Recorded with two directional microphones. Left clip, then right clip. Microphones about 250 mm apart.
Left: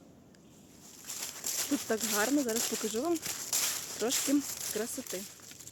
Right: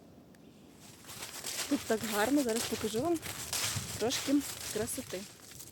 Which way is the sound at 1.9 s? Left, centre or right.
Centre.